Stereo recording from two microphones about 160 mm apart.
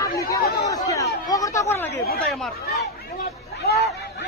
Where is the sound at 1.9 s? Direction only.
75° left (ahead or behind).